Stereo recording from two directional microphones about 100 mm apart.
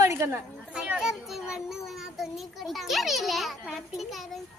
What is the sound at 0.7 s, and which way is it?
A child's voice, 10° right (ahead or behind).